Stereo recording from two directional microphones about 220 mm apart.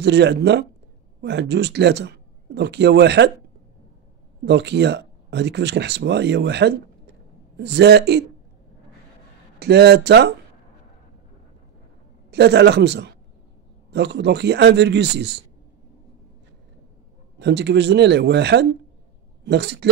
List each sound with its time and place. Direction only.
0.0 s speech: 50° right (ahead or behind)
4.5 s speech: 50° right (ahead or behind)
9.6 s speech: 50° right (ahead or behind)
12.3 s speech: 50° right (ahead or behind)
17.4 s speech: 50° right (ahead or behind)